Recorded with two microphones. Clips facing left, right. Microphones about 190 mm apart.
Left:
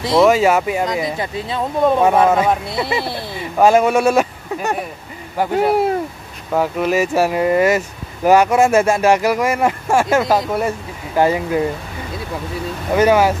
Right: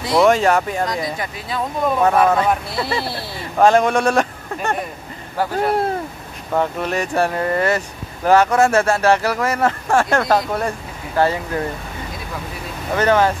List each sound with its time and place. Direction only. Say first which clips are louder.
0.2 s speech: left 2 dB; 5° left (ahead or behind)
1.0 s speech: left 4 dB; 25° left (ahead or behind)
2.2 s speech: left 2 dB; 10° left (ahead or behind)
2.7 s speech: left 2 dB; 20° left (ahead or behind)
3.5 s speech: left 1 dB; 10° left (ahead or behind)
12.9 s speech: left 3 dB; 10° left (ahead or behind)